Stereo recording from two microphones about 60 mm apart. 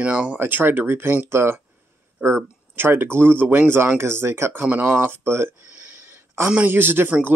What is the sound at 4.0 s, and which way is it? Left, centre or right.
Speech, right.